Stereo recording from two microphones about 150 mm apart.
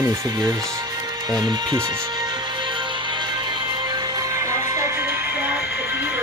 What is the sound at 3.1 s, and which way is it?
Music, 30° right (ahead or behind).